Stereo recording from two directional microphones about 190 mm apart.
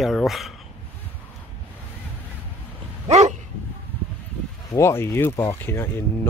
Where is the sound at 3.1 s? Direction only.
35° right (ahead or behind).